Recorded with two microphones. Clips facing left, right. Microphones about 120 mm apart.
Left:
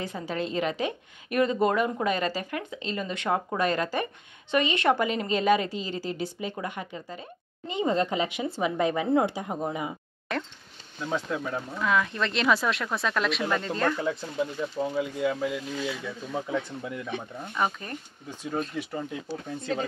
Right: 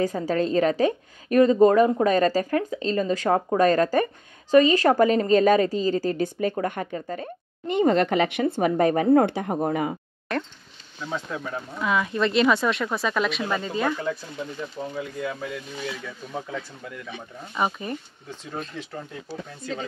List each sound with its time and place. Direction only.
0.0 s a woman's voice: 40° right (ahead or behind)
10.3 s speech: centre (ahead or behind)
15.0 s speech: 10° left (ahead or behind)
17.6 s speech: 10° right (ahead or behind)
18.3 s speech: 10° left (ahead or behind)